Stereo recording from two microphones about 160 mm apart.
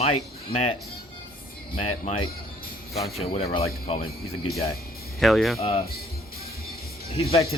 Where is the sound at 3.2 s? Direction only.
40° left (ahead or behind).